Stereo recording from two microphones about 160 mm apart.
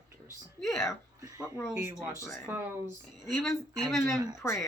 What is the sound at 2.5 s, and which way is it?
Speech, 15° right (ahead or behind).